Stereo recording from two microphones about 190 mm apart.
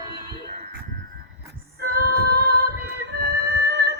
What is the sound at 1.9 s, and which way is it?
Female singing, 55° right (ahead or behind).